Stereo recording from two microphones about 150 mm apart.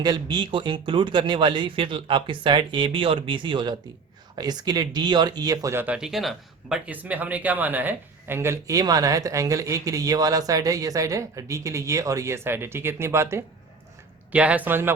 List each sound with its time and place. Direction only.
0.0 s speech: 30° right (ahead or behind)
5.8 s speech: 5° right (ahead or behind)